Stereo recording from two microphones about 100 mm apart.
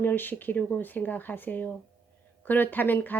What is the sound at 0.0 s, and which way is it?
Speech, 20° left (ahead or behind).